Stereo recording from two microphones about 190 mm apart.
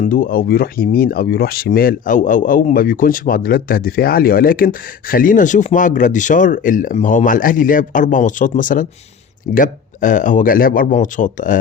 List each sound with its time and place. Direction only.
0.0 s speech: 45° left (ahead or behind)